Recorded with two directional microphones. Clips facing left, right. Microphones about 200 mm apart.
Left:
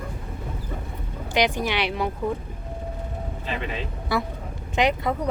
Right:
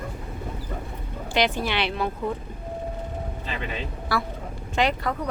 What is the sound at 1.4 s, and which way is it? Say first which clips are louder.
Speech: left 1 dB; 15° left (ahead or behind).